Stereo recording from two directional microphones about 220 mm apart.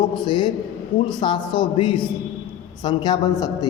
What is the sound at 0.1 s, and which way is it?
A man's voice, 20° left (ahead or behind).